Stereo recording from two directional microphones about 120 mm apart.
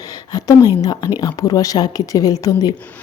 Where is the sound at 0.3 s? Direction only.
30° left (ahead or behind).